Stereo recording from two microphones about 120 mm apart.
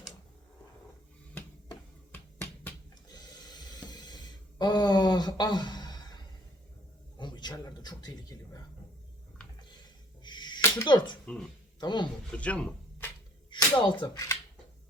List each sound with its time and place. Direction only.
3.1 s a sound: 35° left (ahead or behind)
7.2 s a man's voice: 40° left (ahead or behind)
10.2 s a sound: 40° left (ahead or behind)
10.8 s speech: 40° left (ahead or behind)
12.4 s speech: 10° left (ahead or behind)
13.5 s speech: 45° left (ahead or behind)